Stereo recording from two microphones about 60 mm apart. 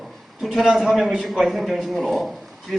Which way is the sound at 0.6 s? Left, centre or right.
Centre.